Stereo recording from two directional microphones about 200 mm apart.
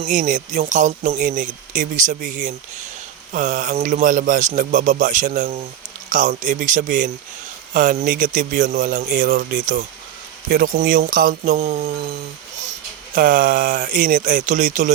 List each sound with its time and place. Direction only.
0.0 s speech: 40° right (ahead or behind)
13.1 s speech: 45° right (ahead or behind)